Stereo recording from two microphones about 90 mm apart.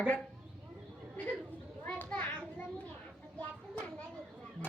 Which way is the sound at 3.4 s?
15° left (ahead or behind).